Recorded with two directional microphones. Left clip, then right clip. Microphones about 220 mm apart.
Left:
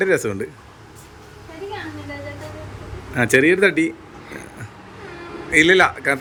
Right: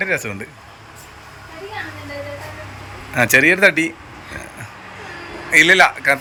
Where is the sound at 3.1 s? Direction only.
15° left (ahead or behind).